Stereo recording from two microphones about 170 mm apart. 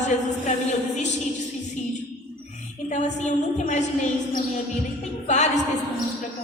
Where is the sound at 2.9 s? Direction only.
45° left (ahead or behind).